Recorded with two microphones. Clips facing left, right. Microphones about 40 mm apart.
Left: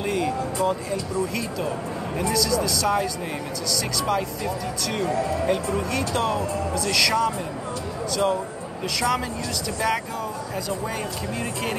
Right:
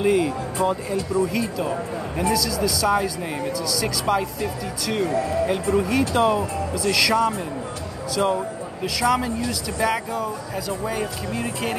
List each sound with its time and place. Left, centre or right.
0.0 s speech: centre
8.8 s speech: centre